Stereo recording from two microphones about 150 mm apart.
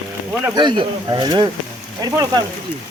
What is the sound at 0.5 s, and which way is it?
Speech, 30° right (ahead or behind).